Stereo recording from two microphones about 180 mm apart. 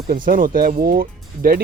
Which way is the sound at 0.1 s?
50° right (ahead or behind).